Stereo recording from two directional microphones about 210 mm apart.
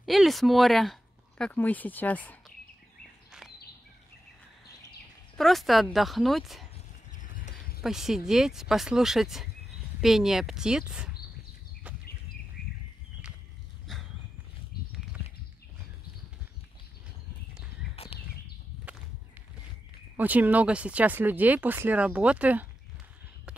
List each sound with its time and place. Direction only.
0.0 s speech: centre (ahead or behind)
3.3 s bird vocalization: centre (ahead or behind)
5.4 s speech: centre (ahead or behind)
7.2 s a sound: 40° left (ahead or behind)
7.8 s speech: centre (ahead or behind)
13.9 s horse: centre (ahead or behind)
17.9 s a sound: 25° left (ahead or behind)
20.2 s speech: 10° right (ahead or behind)